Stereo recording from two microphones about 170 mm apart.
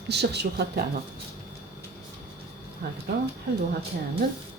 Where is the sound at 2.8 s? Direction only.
70° right (ahead or behind).